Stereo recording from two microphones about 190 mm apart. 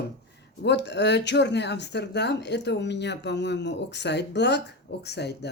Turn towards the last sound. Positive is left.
turn(degrees=60)  # may be behind; listen again after turning